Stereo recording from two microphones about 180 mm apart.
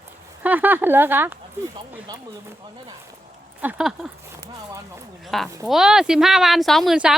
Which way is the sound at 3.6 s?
5° right (ahead or behind).